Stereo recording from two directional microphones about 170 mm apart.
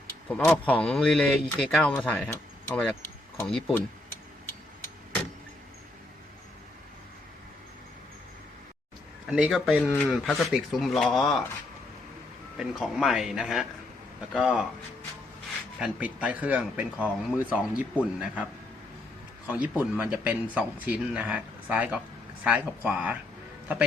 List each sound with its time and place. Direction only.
0.3 s speech: 10° left (ahead or behind)
9.3 s speech: 5° right (ahead or behind)
12.5 s speech: centre (ahead or behind)
15.8 s speech: 10° right (ahead or behind)
19.5 s speech: 5° right (ahead or behind)